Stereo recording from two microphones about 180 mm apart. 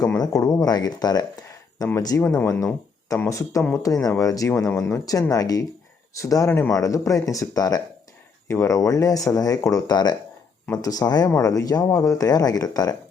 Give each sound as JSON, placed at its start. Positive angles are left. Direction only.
{"t": 0.0, "sound": "speech", "side_deg": 20}